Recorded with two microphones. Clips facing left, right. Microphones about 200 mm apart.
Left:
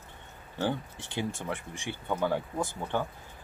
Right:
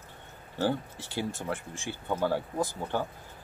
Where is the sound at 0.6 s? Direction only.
5° right (ahead or behind).